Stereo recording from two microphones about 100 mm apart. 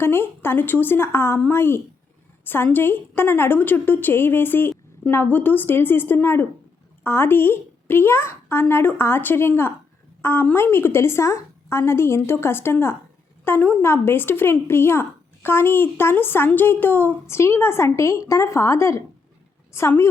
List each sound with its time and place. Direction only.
0.0 s a woman's voice: 25° left (ahead or behind)